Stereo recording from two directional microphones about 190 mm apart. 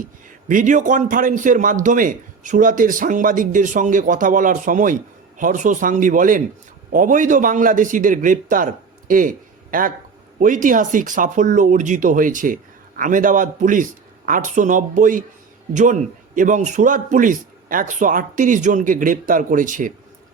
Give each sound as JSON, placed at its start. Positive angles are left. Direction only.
{"t": 0.0, "sound": "a man's voice", "side_deg": -45}